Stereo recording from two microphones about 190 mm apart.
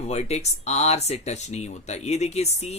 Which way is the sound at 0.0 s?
35° left (ahead or behind).